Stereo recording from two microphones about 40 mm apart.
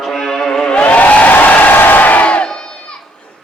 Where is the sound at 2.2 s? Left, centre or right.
Left.